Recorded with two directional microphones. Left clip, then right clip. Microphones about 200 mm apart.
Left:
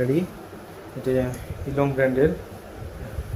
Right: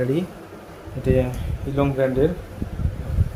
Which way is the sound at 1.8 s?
15° right (ahead or behind).